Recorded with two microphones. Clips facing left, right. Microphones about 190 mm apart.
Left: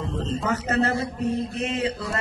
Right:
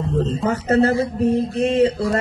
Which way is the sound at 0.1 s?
40° right (ahead or behind).